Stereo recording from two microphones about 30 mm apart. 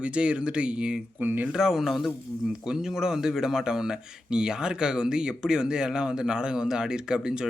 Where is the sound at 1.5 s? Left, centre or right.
Centre.